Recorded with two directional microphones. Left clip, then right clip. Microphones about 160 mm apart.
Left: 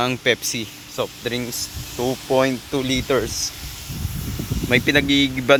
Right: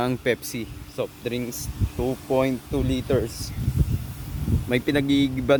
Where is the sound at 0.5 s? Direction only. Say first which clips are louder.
Left 5 dB; centre (ahead or behind).